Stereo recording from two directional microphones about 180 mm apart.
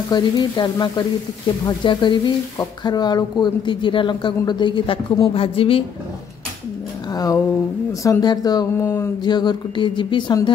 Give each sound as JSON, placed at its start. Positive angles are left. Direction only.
{"t": 0.1, "sound": "a woman's voice", "side_deg": 25}
{"t": 7.1, "sound": "a sound", "side_deg": 20}
{"t": 8.0, "sound": "a woman's voice", "side_deg": 20}